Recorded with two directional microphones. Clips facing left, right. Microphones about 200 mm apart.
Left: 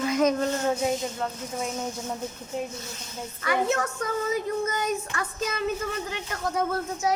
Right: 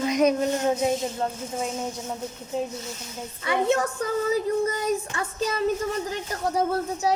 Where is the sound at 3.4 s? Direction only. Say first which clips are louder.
Right 2 dB; 25° right (ahead or behind).